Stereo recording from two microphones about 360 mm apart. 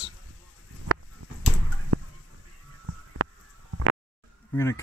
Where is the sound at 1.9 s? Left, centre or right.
Right.